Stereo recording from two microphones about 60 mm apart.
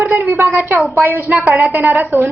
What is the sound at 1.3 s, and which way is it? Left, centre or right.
Speech, right.